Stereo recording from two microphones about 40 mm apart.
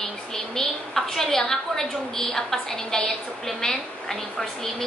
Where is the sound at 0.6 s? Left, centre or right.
Centre.